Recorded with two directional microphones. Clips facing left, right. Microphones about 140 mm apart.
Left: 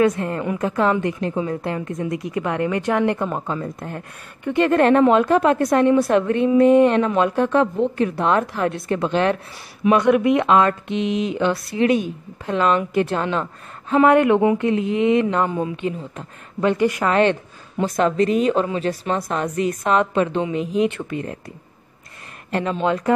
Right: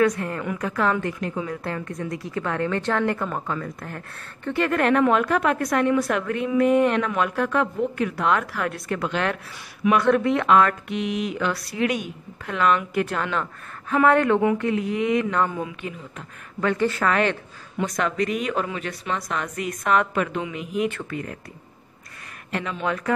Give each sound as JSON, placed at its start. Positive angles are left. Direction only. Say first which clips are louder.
{"t": 0.0, "sound": "speech", "louder": "left 3 dB", "side_deg": 25}
{"t": 22.5, "sound": "speech", "louder": "left 6 dB", "side_deg": 30}